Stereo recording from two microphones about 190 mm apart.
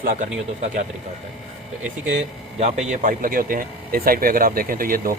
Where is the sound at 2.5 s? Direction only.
35° right (ahead or behind).